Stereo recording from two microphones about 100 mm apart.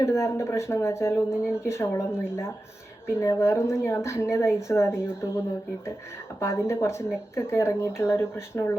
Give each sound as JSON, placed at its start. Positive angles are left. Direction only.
{"t": 0.0, "sound": "speech", "side_deg": 30}
{"t": 6.4, "sound": "speech", "side_deg": 25}